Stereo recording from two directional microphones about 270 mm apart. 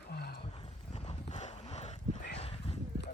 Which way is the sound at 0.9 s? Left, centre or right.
Left.